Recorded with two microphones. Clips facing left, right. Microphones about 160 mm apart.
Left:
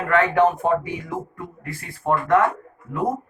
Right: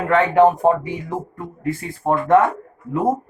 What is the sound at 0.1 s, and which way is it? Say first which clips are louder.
Speech: right 4 dB; 35° right (ahead or behind).